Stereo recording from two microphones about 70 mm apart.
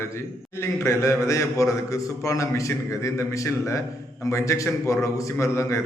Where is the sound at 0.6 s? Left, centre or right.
Left.